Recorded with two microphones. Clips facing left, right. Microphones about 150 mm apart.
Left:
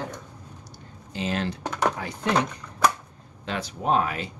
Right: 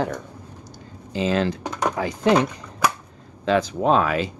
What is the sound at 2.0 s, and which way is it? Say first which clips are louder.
Speech: right 8 dB; 90° right.